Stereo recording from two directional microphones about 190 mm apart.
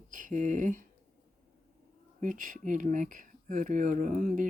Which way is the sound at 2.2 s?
45° right (ahead or behind).